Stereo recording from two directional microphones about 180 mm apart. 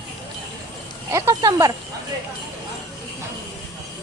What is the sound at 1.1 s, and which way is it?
Speech, 15° right (ahead or behind).